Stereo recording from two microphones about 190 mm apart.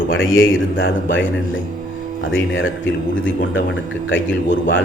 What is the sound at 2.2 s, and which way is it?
Speech, 85° left.